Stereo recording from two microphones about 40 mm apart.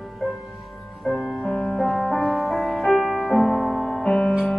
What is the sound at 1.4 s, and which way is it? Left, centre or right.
Music, centre.